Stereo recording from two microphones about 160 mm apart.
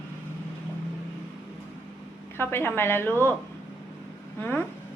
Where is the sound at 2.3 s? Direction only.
15° left (ahead or behind).